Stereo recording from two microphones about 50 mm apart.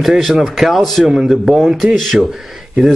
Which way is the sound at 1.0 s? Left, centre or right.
Centre.